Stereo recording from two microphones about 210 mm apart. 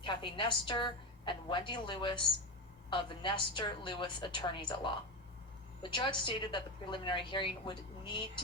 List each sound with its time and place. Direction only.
0.0 s a woman's voice: 25° left (ahead or behind)